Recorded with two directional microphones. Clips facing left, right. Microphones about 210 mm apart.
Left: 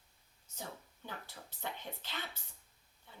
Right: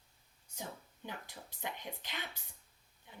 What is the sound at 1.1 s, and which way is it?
Speech, 15° right (ahead or behind).